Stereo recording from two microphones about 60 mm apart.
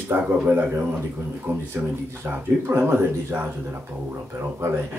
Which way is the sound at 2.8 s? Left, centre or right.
Right.